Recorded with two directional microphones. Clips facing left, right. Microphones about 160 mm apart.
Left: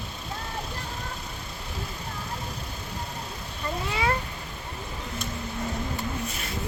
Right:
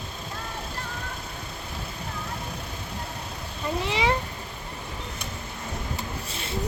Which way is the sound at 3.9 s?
20° right (ahead or behind).